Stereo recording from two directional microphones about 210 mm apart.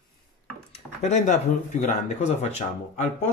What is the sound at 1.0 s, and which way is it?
Speech, 35° left (ahead or behind).